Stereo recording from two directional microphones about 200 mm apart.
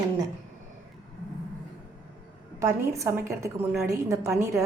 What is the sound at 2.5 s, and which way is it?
A woman's voice, 15° right (ahead or behind).